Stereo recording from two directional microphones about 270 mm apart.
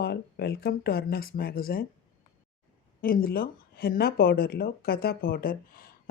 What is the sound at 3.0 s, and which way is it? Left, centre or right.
Speech, left.